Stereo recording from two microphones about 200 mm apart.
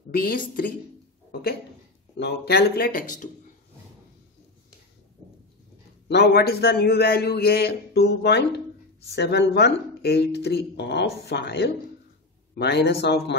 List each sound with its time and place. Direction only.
0.1 s a man's voice: 45° left (ahead or behind)
2.1 s a man's voice: 55° left (ahead or behind)
6.0 s a man's voice: 60° left (ahead or behind)